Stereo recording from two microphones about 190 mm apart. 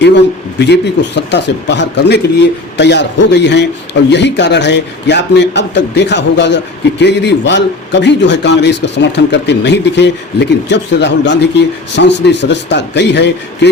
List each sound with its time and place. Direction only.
0.0 s a man's voice: 65° left (ahead or behind)